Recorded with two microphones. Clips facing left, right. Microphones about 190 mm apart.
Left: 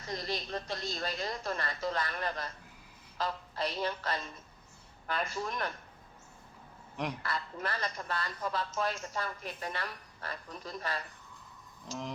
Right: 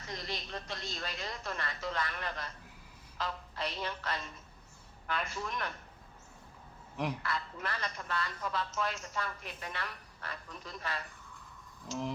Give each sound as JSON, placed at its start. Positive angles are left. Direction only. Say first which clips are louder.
{"t": 0.1, "sound": "a man's voice", "louder": "left 5 dB", "side_deg": 35}
{"t": 6.9, "sound": "a man's voice", "louder": "right 1 dB", "side_deg": 0}
{"t": 7.2, "sound": "a man's voice", "louder": "left 1 dB", "side_deg": 35}